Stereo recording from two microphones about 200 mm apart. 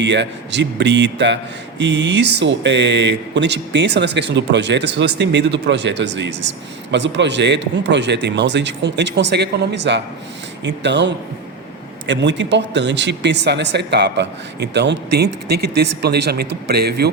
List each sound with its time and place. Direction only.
0.0 s speech: 60° right (ahead or behind)